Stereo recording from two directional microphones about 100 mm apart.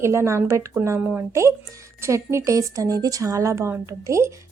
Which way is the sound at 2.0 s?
30° right (ahead or behind).